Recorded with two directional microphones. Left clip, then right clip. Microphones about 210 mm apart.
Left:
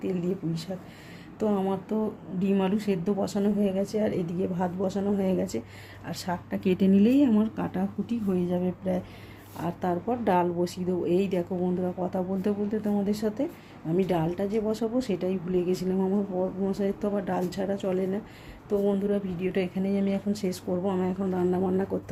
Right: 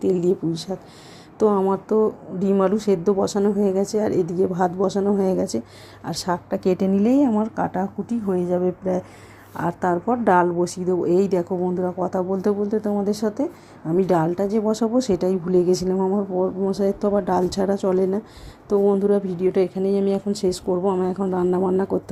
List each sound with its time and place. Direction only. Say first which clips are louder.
0.0 s speech: right 11 dB; 35° right (ahead or behind)